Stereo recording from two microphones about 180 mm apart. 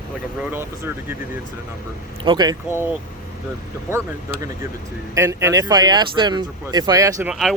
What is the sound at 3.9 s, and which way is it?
Speech, 15° right (ahead or behind).